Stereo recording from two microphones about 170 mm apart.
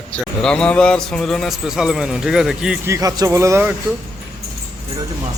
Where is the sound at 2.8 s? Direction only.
20° right (ahead or behind).